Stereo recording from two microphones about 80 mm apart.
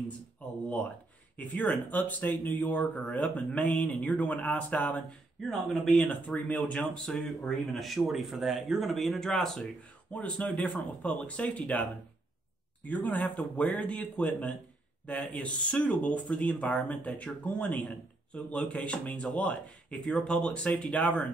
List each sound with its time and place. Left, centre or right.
1.3 s speech: left
2.8 s speech: centre
3.1 s a man's voice: centre
4.1 s speech: centre
4.4 s speech: centre
5.4 s speech: centre
6.0 s a man's voice: left
7.7 s a man's voice: centre